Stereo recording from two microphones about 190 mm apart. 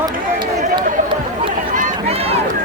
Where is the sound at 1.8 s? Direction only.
35° right (ahead or behind).